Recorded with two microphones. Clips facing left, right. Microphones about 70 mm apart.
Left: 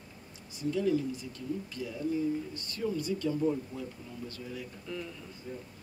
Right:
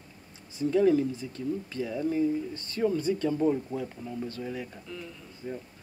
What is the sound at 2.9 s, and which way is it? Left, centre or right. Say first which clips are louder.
Speech: right 4 dB; right.